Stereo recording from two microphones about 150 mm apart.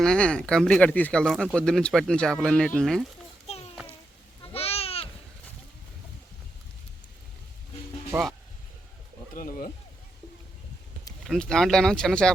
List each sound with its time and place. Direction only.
0.0 s speech: 5° left (ahead or behind)
3.4 s a sound: 45° left (ahead or behind)
4.5 s goat: 40° left (ahead or behind)
8.1 s speech: 20° right (ahead or behind)
9.3 s a sound: 65° left (ahead or behind)
11.3 s speech: 5° left (ahead or behind)